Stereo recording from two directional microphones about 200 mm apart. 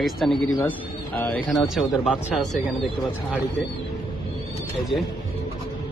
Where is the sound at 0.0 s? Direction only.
Centre (ahead or behind).